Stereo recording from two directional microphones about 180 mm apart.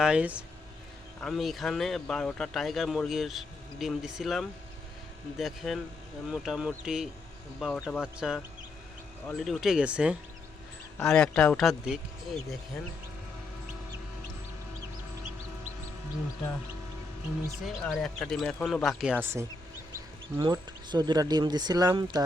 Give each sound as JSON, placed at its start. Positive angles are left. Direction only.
{"t": 0.0, "sound": "speech", "side_deg": -5}
{"t": 10.9, "sound": "speech", "side_deg": 5}
{"t": 17.7, "sound": "speech", "side_deg": 5}
{"t": 20.4, "sound": "speech", "side_deg": -20}